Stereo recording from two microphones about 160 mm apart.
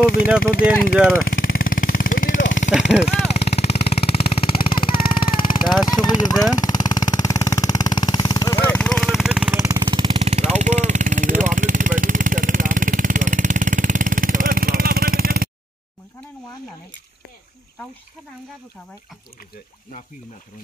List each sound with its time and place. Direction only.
0.0 s speech: 65° left (ahead or behind)
1.2 s vehicle: 60° left (ahead or behind)
3.0 s music: 45° left (ahead or behind)
5.1 s vehicle: 30° left (ahead or behind)
5.8 s speech: 25° left (ahead or behind)
6.5 s vehicle: 25° left (ahead or behind)
8.6 s vehicle: 5° left (ahead or behind)
9.6 s vehicle: 20° right (ahead or behind)
9.8 s vehicle: 30° right (ahead or behind); by 15.5 s 65° right (ahead or behind)